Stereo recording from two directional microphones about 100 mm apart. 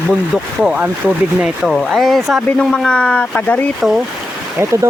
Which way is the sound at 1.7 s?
Centre (ahead or behind).